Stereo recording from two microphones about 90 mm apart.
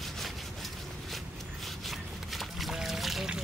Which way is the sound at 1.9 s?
Centre (ahead or behind).